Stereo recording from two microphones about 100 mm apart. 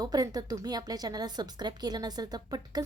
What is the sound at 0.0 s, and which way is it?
A woman's voice, 40° right (ahead or behind).